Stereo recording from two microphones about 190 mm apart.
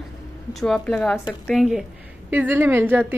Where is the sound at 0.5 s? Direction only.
Centre (ahead or behind).